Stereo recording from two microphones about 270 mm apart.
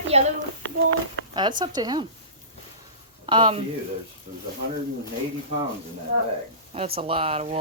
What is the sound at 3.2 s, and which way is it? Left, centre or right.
Speech, centre.